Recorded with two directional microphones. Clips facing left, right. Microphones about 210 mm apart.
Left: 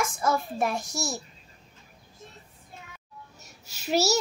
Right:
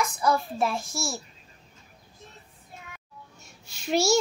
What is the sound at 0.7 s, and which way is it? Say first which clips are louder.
Speech: even; 20° left (ahead or behind).